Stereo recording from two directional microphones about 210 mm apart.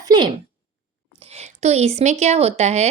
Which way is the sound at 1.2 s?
30° right (ahead or behind).